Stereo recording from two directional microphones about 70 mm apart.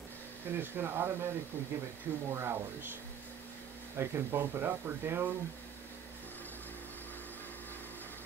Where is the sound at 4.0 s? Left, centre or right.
Right.